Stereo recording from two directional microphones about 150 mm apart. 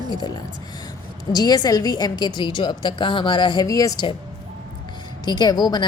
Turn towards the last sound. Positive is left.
turn(degrees=30)  # may be behind; listen again after turning